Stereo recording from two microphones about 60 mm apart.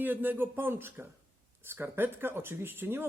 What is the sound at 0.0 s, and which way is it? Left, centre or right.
Speech, right.